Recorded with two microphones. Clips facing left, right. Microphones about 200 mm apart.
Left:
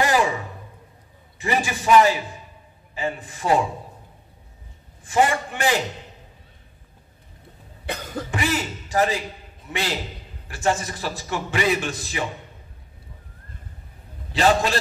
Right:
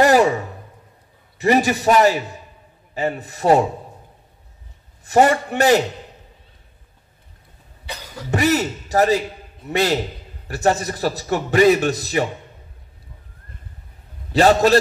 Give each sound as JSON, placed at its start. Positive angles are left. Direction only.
{"t": 0.0, "sound": "a sound", "side_deg": -40}
{"t": 1.4, "sound": "a man's voice", "side_deg": -40}
{"t": 5.0, "sound": "a man's voice", "side_deg": -40}
{"t": 7.8, "sound": "cough", "side_deg": 55}
{"t": 8.3, "sound": "a sound", "side_deg": -40}
{"t": 9.7, "sound": "a man's voice", "side_deg": -40}
{"t": 14.3, "sound": "a man's voice", "side_deg": -40}